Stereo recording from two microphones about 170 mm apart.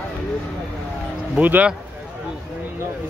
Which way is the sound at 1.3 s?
10° right (ahead or behind).